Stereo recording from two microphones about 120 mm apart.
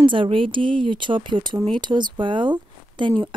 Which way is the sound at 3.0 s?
40° right (ahead or behind).